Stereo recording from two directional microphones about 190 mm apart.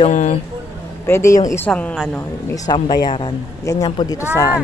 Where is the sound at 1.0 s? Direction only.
15° left (ahead or behind).